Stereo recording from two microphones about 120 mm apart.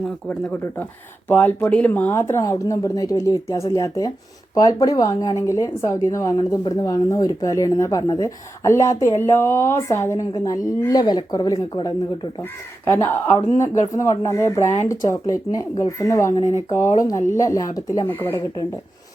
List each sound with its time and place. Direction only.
0.3 s a woman's voice: 15° left (ahead or behind)
10.9 s speech: 40° left (ahead or behind)
12.4 s a woman's voice: 20° left (ahead or behind)